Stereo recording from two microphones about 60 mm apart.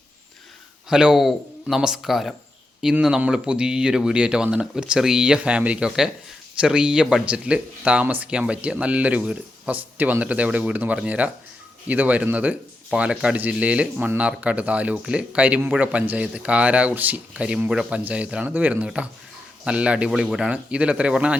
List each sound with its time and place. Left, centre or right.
0.9 s speech: centre; by 17.2 s right
17.3 s speech: centre
20.5 s speech: right